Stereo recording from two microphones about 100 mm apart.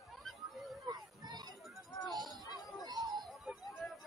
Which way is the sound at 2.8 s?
40° right (ahead or behind).